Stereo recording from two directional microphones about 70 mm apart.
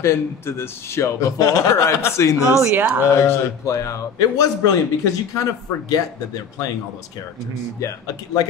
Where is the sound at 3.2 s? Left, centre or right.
Left.